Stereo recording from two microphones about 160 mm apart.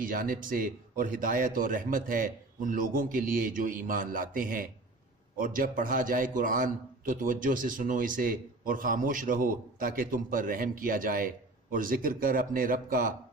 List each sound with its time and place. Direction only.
0.0 s a man's voice: 60° right (ahead or behind)